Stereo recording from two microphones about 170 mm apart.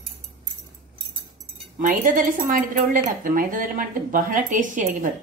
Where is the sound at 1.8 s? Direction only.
50° right (ahead or behind).